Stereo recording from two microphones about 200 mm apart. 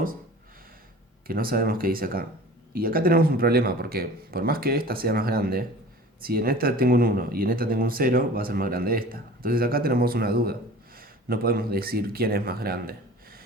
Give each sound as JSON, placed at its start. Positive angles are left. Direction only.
{"t": 1.3, "sound": "speech", "side_deg": -45}